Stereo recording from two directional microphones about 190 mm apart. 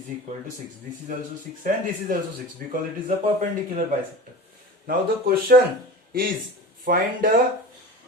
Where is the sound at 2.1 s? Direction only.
45° right (ahead or behind).